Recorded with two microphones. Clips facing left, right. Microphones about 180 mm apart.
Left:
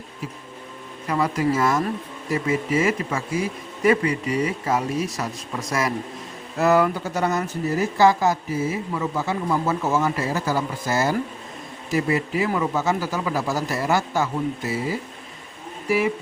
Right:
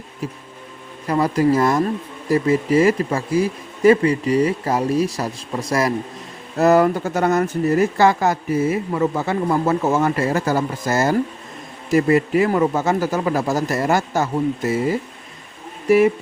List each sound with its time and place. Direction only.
1.0 s speech: 35° right (ahead or behind)